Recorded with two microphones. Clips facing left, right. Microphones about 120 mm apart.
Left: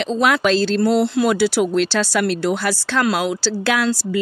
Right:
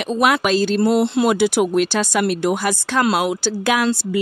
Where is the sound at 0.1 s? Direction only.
15° right (ahead or behind).